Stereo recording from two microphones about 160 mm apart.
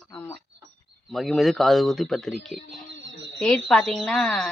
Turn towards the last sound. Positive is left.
turn(degrees=0)  # may be behind; listen again after turning